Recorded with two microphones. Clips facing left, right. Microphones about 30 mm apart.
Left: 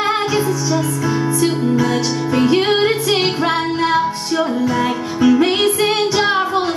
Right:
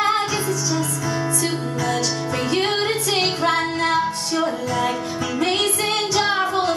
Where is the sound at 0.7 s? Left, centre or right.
Centre.